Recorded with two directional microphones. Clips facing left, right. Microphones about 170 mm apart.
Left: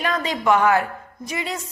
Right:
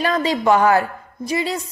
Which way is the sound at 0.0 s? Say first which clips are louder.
Right 4 dB; 30° right (ahead or behind).